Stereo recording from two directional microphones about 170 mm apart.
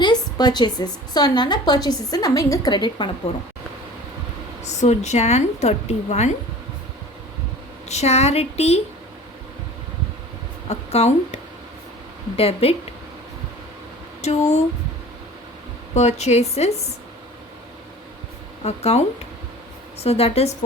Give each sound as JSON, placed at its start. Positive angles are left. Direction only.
{"t": 0.0, "sound": "a woman's voice", "side_deg": 25}
{"t": 4.8, "sound": "a woman's voice", "side_deg": 40}
{"t": 7.9, "sound": "a woman's voice", "side_deg": 40}
{"t": 10.7, "sound": "a woman's voice", "side_deg": 40}
{"t": 12.4, "sound": "a woman's voice", "side_deg": 35}
{"t": 14.2, "sound": "speech", "side_deg": 40}
{"t": 16.0, "sound": "a woman's voice", "side_deg": 40}
{"t": 18.6, "sound": "a woman's voice", "side_deg": 40}